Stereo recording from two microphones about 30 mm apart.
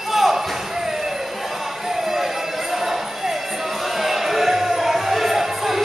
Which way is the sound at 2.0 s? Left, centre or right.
Centre.